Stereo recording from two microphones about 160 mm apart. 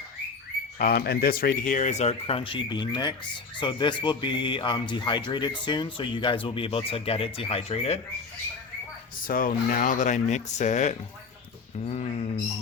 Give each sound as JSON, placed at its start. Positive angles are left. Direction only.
{"t": 0.8, "sound": "speech", "side_deg": 70}
{"t": 9.2, "sound": "speech", "side_deg": 60}